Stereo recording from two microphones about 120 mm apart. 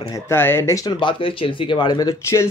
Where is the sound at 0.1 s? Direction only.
20° left (ahead or behind).